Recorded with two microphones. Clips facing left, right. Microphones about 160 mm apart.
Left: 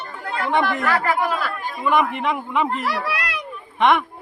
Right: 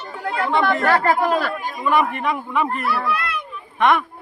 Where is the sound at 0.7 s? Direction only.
35° right (ahead or behind).